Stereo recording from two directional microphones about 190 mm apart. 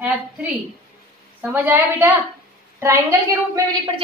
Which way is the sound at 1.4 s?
10° right (ahead or behind).